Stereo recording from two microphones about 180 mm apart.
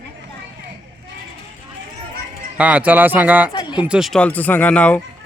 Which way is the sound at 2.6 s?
5° right (ahead or behind).